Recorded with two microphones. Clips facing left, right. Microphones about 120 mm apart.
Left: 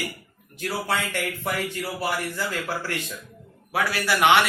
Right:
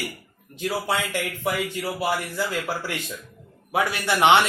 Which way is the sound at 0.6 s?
15° right (ahead or behind).